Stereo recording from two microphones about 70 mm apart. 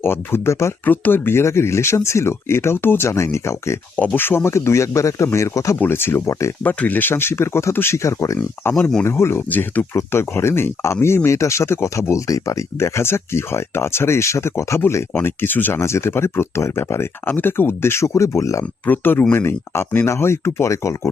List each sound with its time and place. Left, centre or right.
0.0 s speech: left
3.9 s speech: left
5.8 s speech: left
6.6 s speech: left
8.7 s speech: centre
9.0 s speech: left
9.5 s speech: left
9.9 s speech: left
15.8 s speech: left
18.9 s speech: left